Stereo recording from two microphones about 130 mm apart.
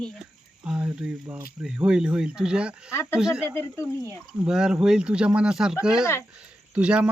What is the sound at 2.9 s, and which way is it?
Speech, 20° left (ahead or behind).